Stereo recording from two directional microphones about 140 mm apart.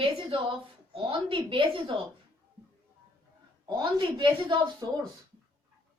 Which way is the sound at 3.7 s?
35° right (ahead or behind).